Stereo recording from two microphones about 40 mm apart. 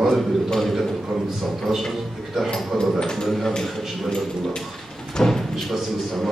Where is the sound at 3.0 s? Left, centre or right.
Centre.